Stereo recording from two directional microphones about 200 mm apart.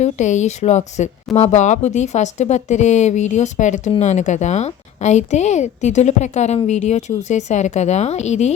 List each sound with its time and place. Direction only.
0.0 s a woman's voice: 35° left (ahead or behind)